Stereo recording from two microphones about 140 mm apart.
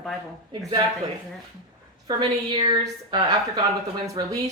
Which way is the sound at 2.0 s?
35° right (ahead or behind).